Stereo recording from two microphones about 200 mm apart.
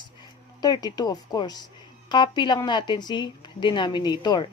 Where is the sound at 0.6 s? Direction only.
20° left (ahead or behind).